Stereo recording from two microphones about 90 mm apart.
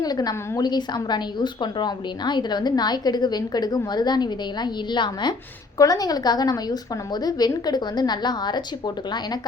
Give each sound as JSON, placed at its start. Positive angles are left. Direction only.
{"t": 0.0, "sound": "a woman's voice", "side_deg": 45}
{"t": 5.7, "sound": "a woman's voice", "side_deg": 40}